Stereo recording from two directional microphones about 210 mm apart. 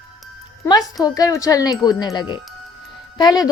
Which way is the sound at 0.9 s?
15° left (ahead or behind).